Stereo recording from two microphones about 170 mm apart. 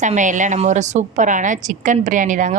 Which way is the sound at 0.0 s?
45° right (ahead or behind).